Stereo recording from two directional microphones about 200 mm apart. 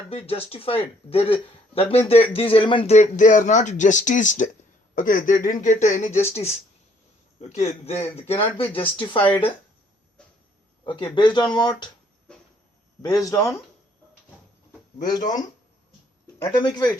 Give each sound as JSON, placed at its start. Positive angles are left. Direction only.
{"t": 0.1, "sound": "speech", "side_deg": 30}
{"t": 10.8, "sound": "speech", "side_deg": 25}
{"t": 13.0, "sound": "speech", "side_deg": 20}
{"t": 16.2, "sound": "speech", "side_deg": 20}